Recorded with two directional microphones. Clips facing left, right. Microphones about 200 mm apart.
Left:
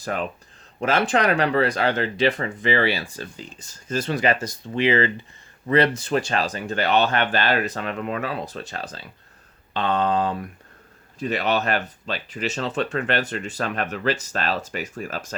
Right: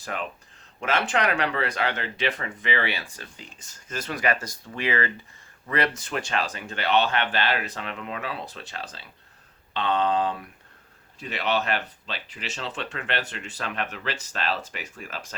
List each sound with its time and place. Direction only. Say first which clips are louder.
0.0 s speech: left 6 dB; 40° left (ahead or behind)